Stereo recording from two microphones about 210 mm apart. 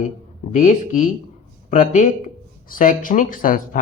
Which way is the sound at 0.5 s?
40° left (ahead or behind).